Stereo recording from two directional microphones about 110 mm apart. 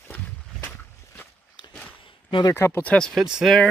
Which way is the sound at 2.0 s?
50° left (ahead or behind).